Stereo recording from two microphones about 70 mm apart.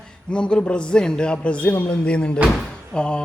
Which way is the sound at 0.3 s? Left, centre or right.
Centre.